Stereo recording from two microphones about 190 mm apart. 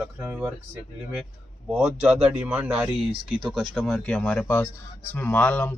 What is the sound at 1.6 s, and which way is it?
Speech, 10° right (ahead or behind).